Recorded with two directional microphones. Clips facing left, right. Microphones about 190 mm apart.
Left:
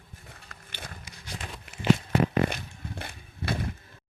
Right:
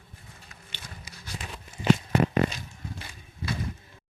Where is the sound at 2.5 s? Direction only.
60° left (ahead or behind).